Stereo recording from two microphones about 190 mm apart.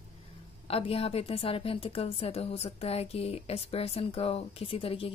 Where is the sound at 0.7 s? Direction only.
30° left (ahead or behind).